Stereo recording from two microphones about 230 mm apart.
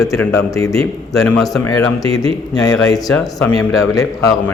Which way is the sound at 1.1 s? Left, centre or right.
Centre.